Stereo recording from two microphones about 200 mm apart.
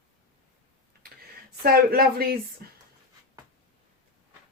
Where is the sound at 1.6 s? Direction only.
50° right (ahead or behind).